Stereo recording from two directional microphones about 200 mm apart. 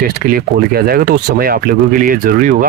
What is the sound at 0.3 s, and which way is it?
Speech, 50° right (ahead or behind).